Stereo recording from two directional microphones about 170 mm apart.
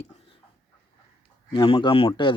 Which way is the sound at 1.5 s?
30° left (ahead or behind).